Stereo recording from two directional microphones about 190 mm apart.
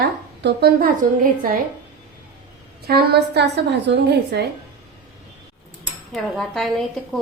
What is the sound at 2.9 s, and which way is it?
A woman's voice, 55° right (ahead or behind).